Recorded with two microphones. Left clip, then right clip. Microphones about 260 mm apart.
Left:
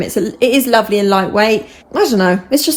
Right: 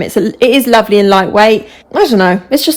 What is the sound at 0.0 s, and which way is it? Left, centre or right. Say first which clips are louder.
A woman's voice: right 4 dB; right.